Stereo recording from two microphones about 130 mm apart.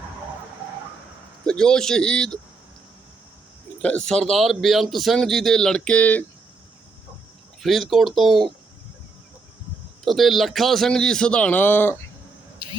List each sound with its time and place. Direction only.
1.5 s a man's voice: 5° left (ahead or behind)
3.8 s a man's voice: 10° left (ahead or behind)
7.6 s a man's voice: centre (ahead or behind)
10.0 s a man's voice: centre (ahead or behind)
12.6 s a sound: 35° right (ahead or behind)